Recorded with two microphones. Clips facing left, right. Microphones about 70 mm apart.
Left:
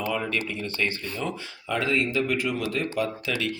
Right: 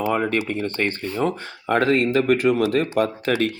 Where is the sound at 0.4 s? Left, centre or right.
Right.